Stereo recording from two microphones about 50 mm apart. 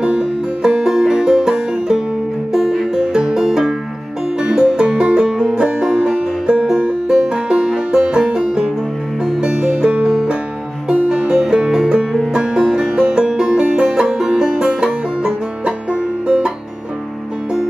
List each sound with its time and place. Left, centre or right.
0.0 s music: centre
12.6 s music: centre; by 16.5 s right